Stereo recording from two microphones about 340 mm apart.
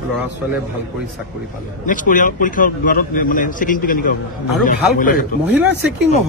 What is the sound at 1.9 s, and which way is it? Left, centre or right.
A man's voice, left.